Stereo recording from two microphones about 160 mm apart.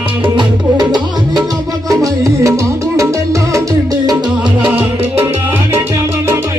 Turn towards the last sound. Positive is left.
turn(degrees=-15)  # may be behind; listen again after turning